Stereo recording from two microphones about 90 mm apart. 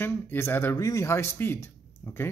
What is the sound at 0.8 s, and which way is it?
Speech, 35° left (ahead or behind).